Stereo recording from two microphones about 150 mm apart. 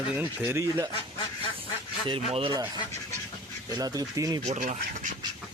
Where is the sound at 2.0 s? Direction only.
35° right (ahead or behind).